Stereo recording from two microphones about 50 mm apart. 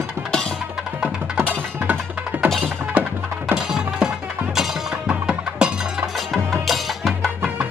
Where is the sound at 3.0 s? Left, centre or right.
Right.